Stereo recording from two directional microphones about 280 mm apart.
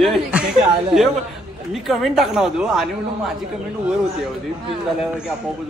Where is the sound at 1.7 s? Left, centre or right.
Centre.